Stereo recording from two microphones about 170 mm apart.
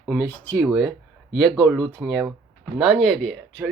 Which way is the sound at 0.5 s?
5° right (ahead or behind).